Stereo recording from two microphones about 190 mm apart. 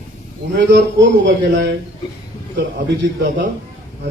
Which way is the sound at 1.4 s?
60° right (ahead or behind).